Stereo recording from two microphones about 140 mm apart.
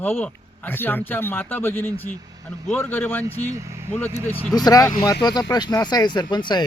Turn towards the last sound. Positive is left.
turn(degrees=35)  # may be behind; listen again after turning